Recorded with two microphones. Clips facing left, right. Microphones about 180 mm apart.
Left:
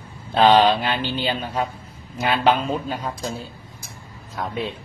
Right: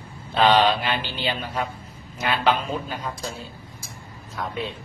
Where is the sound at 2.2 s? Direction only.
35° left (ahead or behind).